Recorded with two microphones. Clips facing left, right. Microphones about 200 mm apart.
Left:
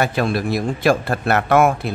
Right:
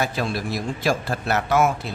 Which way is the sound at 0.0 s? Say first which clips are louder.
Left 5 dB; 60° left (ahead or behind).